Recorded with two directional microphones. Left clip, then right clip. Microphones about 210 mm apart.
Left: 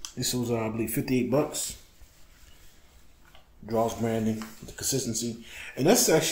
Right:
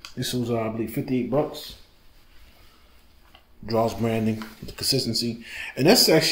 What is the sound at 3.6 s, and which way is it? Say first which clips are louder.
Speech: right 4 dB; 15° right (ahead or behind).